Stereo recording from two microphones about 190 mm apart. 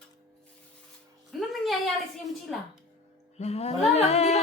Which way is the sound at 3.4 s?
35° left (ahead or behind).